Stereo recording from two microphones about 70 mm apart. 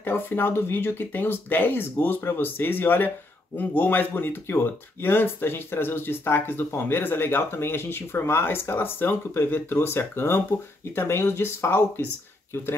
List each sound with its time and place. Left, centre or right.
0.0 s speech: left